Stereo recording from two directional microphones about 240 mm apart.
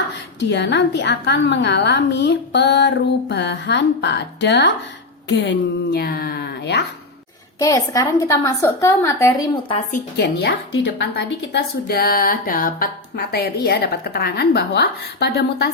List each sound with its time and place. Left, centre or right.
0.3 s a woman's voice: left
7.6 s a woman's voice: centre
10.2 s a woman's voice: left